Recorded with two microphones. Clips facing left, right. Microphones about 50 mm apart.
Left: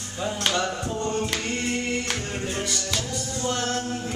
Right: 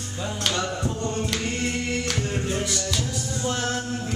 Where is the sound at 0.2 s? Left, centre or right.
Centre.